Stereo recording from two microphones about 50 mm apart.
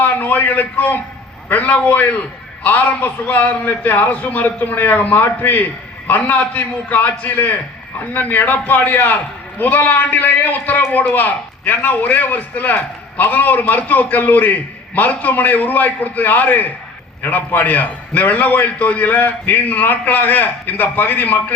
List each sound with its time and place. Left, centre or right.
0.0 s a man's voice: left